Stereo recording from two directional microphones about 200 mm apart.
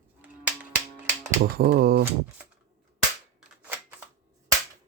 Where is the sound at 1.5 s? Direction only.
50° right (ahead or behind).